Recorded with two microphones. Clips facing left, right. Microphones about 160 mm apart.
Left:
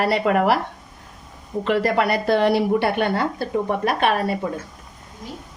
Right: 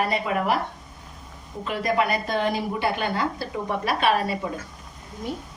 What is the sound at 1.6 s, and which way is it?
A woman's voice, 70° left (ahead or behind).